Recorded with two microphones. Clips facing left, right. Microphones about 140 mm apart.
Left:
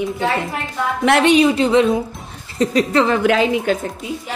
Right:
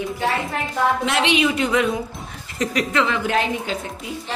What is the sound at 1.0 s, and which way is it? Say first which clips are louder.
Speech: left 7 dB; 60° left (ahead or behind).